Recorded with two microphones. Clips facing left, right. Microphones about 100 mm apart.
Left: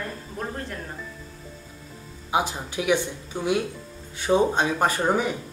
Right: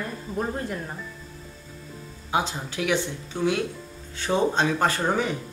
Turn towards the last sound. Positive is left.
turn(degrees=10)  # may be behind; listen again after turning